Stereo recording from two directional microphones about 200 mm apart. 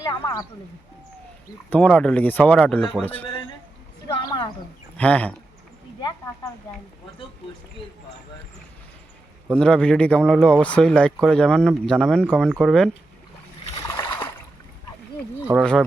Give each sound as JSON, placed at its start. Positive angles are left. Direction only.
{"t": 0.0, "sound": "speech", "side_deg": 20}
{"t": 1.7, "sound": "speech", "side_deg": 5}
{"t": 4.1, "sound": "a sound", "side_deg": 20}
{"t": 4.9, "sound": "speech", "side_deg": 5}
{"t": 6.0, "sound": "speech", "side_deg": 20}
{"t": 9.6, "sound": "speech", "side_deg": 5}
{"t": 13.8, "sound": "a sound", "side_deg": 15}